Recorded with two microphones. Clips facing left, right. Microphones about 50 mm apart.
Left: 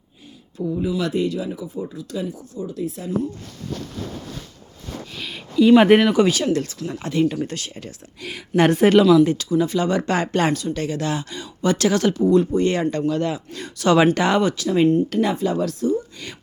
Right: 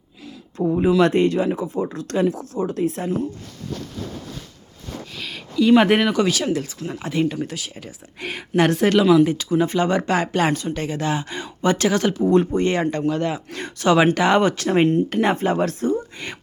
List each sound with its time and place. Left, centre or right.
0.5 s speech: right
5.1 s speech: centre
8.6 s speech: centre
9.2 s speech: centre
9.5 s speech: right
10.1 s speech: centre
10.8 s speech: centre
11.3 s speech: right
13.5 s speech: right
13.8 s speech: centre
14.3 s speech: right
14.6 s speech: right